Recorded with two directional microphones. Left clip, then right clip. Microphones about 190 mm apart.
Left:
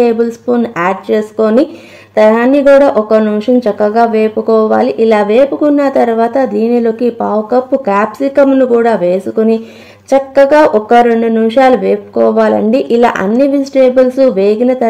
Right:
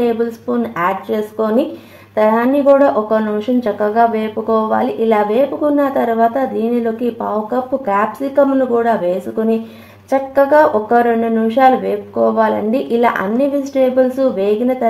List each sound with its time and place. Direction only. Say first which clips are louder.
0.0 s speech: left 6 dB; 55° left (ahead or behind)